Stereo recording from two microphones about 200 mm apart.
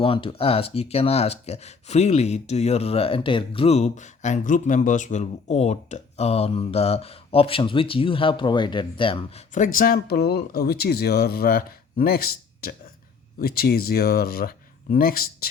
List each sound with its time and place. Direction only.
0.0 s speech: 25° left (ahead or behind)
9.5 s speech: 40° left (ahead or behind)